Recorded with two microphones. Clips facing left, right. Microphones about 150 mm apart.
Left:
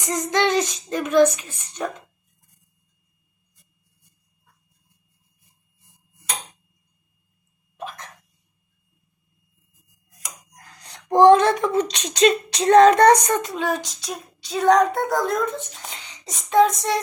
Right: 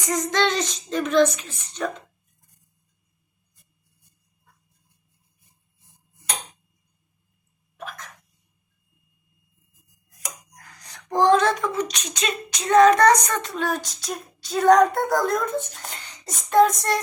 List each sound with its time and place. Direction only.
0.0 s a child's voice: 15° left (ahead or behind)
10.5 s speech: 25° left (ahead or behind)
13.4 s child singing: 5° left (ahead or behind)